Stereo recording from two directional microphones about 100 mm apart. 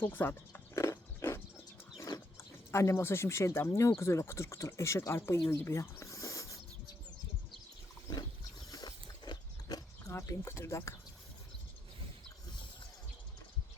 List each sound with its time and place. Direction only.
0.0 s a sound: 20° left (ahead or behind)
2.0 s speech: 35° left (ahead or behind)
8.7 s mechanisms: 45° left (ahead or behind)
10.1 s speech: 25° left (ahead or behind)